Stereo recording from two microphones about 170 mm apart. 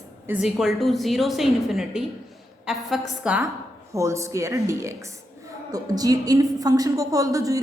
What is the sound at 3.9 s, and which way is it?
A woman's voice, 15° right (ahead or behind).